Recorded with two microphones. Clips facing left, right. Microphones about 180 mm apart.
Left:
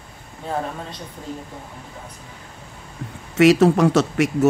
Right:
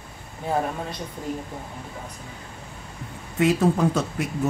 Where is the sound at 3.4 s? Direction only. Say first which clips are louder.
Left 6 dB; 85° left.